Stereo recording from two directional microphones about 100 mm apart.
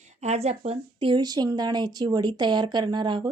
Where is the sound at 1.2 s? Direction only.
40° right (ahead or behind).